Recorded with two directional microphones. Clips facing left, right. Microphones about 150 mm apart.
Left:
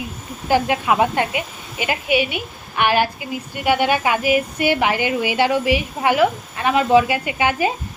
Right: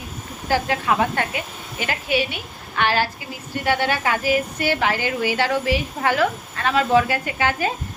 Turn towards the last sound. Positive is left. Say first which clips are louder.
# left 3 dB
turn(degrees=15)  # may be behind; listen again after turning